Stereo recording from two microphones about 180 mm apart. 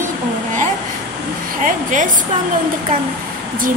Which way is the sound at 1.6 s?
45° right (ahead or behind).